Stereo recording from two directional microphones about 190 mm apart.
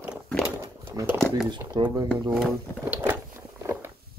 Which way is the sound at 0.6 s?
15° right (ahead or behind).